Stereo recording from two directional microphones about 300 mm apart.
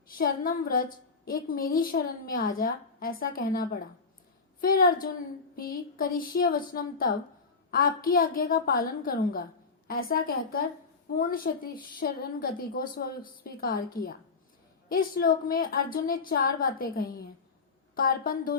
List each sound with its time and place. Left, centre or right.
0.2 s a woman's voice: left